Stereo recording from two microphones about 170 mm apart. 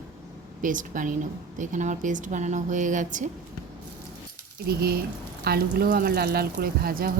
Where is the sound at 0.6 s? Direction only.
50° right (ahead or behind).